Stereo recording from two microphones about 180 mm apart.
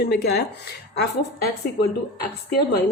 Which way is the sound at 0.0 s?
65° left (ahead or behind).